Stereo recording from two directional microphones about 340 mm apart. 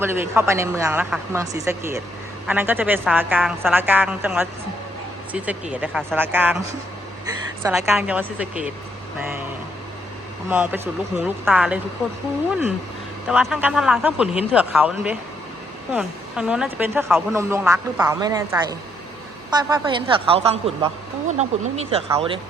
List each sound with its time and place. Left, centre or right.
0.0 s speech: centre
10.5 s speech: centre
13.2 s speech: centre